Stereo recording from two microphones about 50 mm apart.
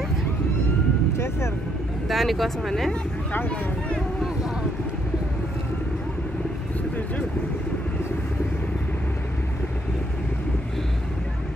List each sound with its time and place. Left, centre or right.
1.1 s vehicle: left
2.0 s speech: centre